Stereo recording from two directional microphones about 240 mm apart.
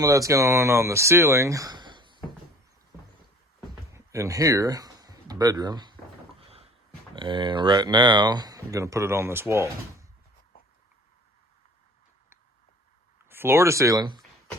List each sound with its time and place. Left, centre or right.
0.0 s speech: centre
3.9 s speech: centre
7.2 s speech: right
13.2 s speech: centre